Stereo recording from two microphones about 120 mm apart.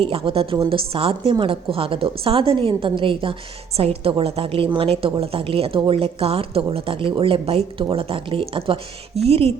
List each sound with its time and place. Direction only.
0.0 s a woman's voice: 50° right (ahead or behind)